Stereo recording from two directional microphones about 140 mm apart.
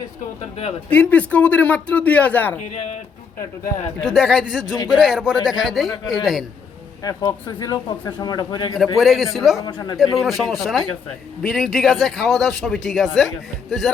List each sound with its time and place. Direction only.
0.9 s speech: 10° left (ahead or behind)
2.6 s speech: 55° left (ahead or behind)
4.0 s speech: 5° left (ahead or behind)
7.0 s speech: 25° left (ahead or behind)
9.0 s speech: centre (ahead or behind)
9.6 s speech: 30° left (ahead or behind)
10.0 s speech: centre (ahead or behind)